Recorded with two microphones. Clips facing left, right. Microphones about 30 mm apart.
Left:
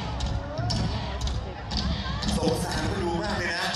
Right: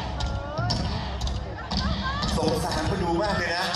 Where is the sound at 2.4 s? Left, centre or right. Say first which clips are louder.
Right 1 dB; centre.